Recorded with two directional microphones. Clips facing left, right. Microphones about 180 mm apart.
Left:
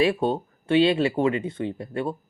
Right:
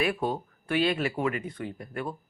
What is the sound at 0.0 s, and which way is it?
Speech, 25° left (ahead or behind).